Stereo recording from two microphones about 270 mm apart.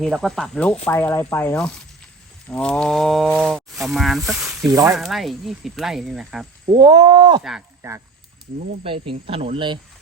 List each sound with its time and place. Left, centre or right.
0.0 s speech: centre
4.6 s wild animals: centre
4.9 s speech: centre
6.7 s wild animals: centre
7.4 s speech: centre
8.8 s speech: centre